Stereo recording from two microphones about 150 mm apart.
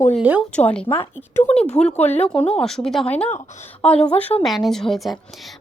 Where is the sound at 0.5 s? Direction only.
10° left (ahead or behind).